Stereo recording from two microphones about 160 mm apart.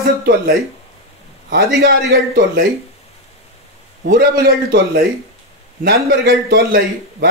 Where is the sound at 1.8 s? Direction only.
85° right.